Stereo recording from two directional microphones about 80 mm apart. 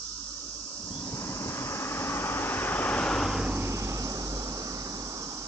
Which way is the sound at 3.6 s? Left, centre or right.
Right.